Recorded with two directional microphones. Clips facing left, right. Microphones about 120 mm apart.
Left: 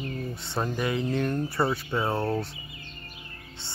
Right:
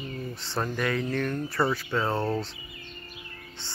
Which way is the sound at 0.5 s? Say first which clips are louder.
Even; 15° left (ahead or behind).